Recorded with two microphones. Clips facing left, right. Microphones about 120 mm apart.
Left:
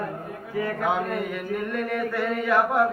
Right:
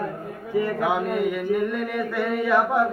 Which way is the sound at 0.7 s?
5° right (ahead or behind).